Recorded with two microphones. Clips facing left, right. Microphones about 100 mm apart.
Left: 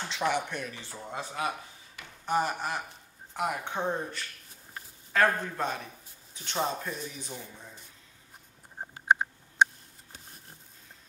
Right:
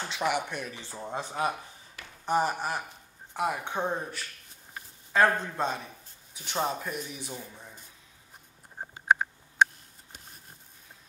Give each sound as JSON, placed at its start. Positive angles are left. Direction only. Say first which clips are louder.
{"t": 0.1, "sound": "speech", "louder": "even", "side_deg": -10}
{"t": 2.2, "sound": "speech", "louder": "right 2 dB", "side_deg": -15}
{"t": 5.1, "sound": "a man's voice", "louder": "right 2 dB", "side_deg": -20}